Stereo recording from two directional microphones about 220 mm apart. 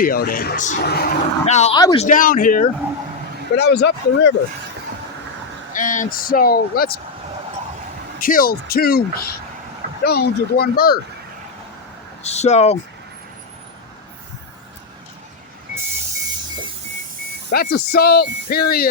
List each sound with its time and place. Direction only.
0.0 s speech: 40° left (ahead or behind)
1.5 s speech: 30° left (ahead or behind)
1.7 s speech: 20° left (ahead or behind)
2.0 s speech: 40° left (ahead or behind)
3.5 s speech: 50° left (ahead or behind)
5.7 s speech: 35° left (ahead or behind)
8.2 s speech: 40° left (ahead or behind)
12.2 s speech: 30° left (ahead or behind)
17.5 s speech: 45° left (ahead or behind)